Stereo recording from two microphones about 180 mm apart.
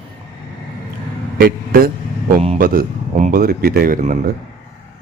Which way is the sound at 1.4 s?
55° right (ahead or behind).